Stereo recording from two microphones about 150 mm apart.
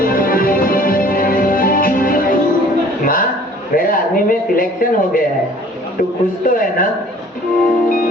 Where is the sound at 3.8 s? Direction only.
70° left (ahead or behind).